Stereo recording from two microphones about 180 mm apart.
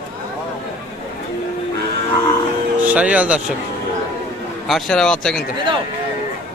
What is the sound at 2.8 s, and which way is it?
Speech, 10° right (ahead or behind).